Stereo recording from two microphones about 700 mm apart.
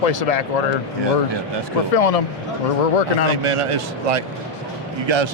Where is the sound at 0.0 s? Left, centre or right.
Left.